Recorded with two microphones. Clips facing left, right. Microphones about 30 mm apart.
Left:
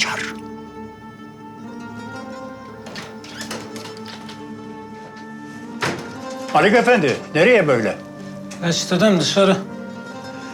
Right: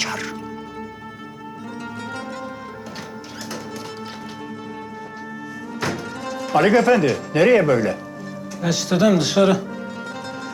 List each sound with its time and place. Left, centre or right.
0.0 s music: centre
5.8 s music: centre
6.2 s music: centre
6.5 s speech: left